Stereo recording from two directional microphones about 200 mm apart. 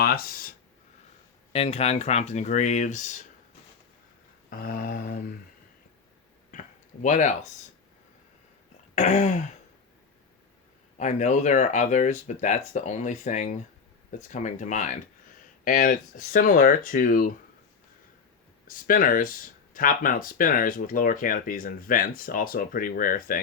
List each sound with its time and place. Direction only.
0.0 s a sound: 50° left (ahead or behind)
1.5 s speech: 30° left (ahead or behind)
4.4 s speech: 45° left (ahead or behind)
6.5 s a sound: 40° left (ahead or behind)
9.0 s speech: 35° left (ahead or behind)
10.9 s speech: 35° left (ahead or behind)
18.7 s speech: 45° left (ahead or behind)